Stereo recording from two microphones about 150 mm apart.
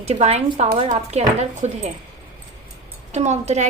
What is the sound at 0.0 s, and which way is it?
A woman's voice, 45° right (ahead or behind).